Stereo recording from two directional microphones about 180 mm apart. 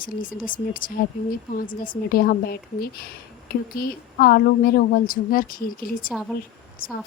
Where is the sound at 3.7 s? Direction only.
55° left (ahead or behind).